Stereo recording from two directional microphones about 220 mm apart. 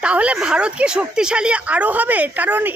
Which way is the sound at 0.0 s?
5° right (ahead or behind).